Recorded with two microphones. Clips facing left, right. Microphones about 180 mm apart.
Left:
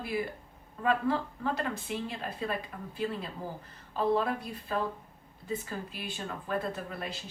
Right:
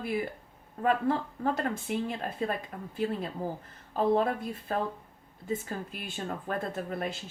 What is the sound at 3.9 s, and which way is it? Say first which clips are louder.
A woman's voice: right 2 dB; 50° right (ahead or behind).